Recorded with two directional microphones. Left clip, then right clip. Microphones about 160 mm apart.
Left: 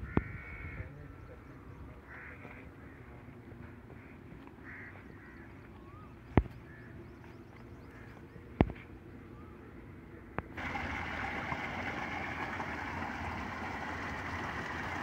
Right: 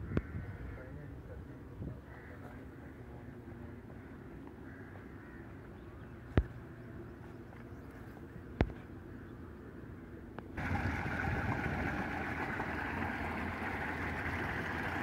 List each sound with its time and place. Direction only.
10.5 s vehicle: centre (ahead or behind)
11.6 s vehicle: 15° left (ahead or behind)